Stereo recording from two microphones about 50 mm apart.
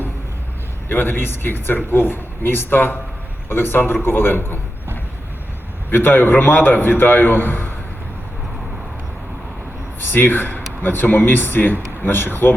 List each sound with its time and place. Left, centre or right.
0.9 s speech: left
5.9 s speech: left
10.0 s speech: left